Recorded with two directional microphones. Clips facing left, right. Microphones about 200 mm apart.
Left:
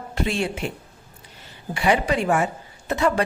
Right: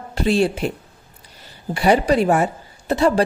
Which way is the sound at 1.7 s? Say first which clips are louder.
Right 5 dB; 35° right (ahead or behind).